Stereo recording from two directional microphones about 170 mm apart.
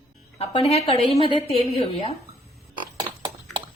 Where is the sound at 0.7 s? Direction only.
35° left (ahead or behind).